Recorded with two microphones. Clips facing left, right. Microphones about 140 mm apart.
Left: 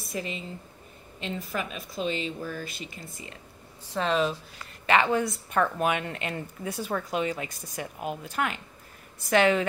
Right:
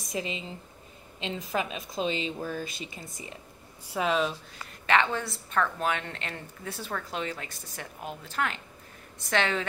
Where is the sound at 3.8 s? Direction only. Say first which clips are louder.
Left 1 dB; 5° right (ahead or behind).